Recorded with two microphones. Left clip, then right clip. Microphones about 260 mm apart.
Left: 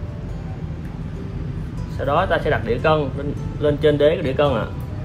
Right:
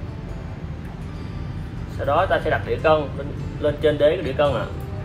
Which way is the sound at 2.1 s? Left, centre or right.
Left.